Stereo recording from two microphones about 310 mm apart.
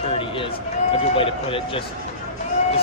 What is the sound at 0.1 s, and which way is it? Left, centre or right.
Speech, centre.